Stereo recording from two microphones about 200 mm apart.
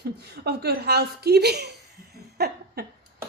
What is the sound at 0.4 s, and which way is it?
A woman's voice, 55° right (ahead or behind).